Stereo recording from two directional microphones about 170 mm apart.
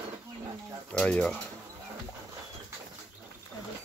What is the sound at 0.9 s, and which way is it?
Speech, 5° left (ahead or behind).